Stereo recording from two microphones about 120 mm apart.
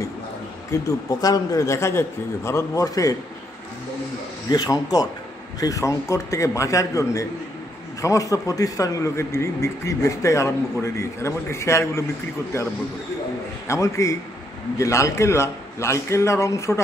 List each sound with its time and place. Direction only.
0.7 s speech: 30° left (ahead or behind)
4.5 s speech: 30° left (ahead or behind)